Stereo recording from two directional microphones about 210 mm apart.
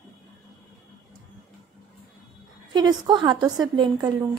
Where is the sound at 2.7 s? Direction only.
20° right (ahead or behind).